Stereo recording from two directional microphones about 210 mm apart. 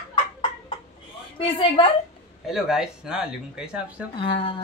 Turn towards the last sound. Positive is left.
turn(degrees=25)  # may be behind; listen again after turning